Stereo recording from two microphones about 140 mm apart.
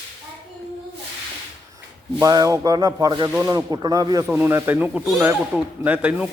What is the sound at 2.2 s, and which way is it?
Music, 25° right (ahead or behind).